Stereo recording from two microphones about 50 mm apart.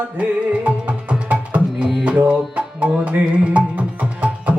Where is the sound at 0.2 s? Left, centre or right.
Right.